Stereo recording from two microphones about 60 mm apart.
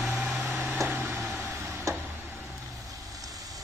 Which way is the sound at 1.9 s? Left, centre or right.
Right.